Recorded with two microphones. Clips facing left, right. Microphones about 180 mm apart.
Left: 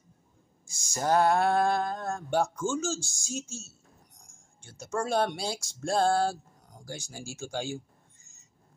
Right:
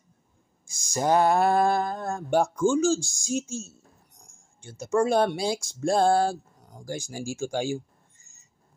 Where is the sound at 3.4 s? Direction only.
55° right (ahead or behind).